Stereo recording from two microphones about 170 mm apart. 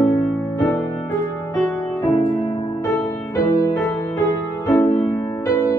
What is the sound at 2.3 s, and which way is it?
Music, 25° left (ahead or behind).